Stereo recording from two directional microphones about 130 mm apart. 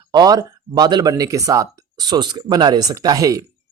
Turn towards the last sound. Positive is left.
turn(degrees=-25)  # may be behind; listen again after turning